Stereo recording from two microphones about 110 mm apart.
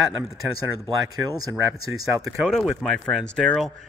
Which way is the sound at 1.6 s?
25° right (ahead or behind).